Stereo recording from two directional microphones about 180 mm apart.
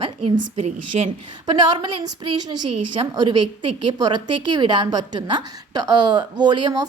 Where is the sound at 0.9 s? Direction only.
40° right (ahead or behind).